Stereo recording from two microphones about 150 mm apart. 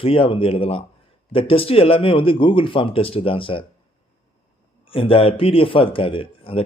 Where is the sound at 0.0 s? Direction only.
35° left (ahead or behind).